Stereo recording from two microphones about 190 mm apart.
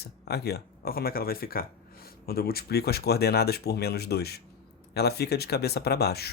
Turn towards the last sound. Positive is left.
turn(degrees=55)  # may be behind; listen again after turning